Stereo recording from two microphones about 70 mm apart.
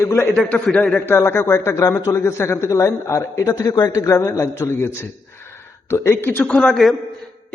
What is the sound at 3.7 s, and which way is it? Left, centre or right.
Speech, left.